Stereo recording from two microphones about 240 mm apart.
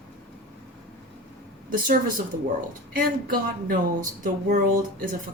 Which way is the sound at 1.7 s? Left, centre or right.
Right.